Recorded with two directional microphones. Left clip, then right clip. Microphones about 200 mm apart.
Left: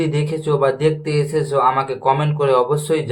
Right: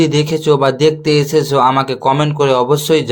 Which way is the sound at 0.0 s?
40° right (ahead or behind).